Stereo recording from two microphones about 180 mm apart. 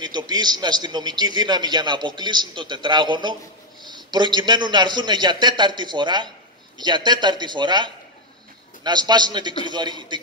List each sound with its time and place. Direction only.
0.0 s a man's voice: 25° right (ahead or behind)